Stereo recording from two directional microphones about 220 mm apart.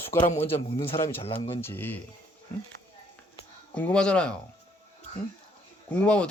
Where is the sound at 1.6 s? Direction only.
10° left (ahead or behind).